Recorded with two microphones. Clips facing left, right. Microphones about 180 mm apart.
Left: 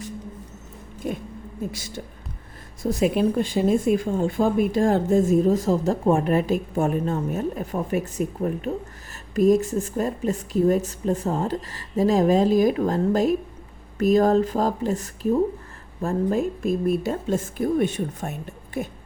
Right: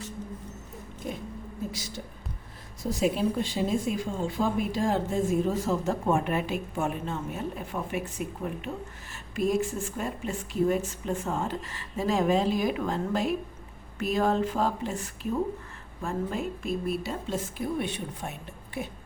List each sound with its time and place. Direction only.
1.0 s hoot: 60° left (ahead or behind)
2.9 s a woman's voice: 55° left (ahead or behind)